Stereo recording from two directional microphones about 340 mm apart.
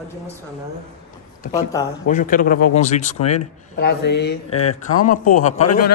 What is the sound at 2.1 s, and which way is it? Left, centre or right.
Speech, left.